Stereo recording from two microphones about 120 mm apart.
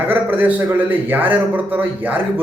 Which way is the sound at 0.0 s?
15° right (ahead or behind).